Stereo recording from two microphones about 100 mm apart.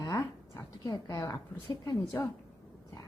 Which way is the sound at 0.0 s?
35° left (ahead or behind).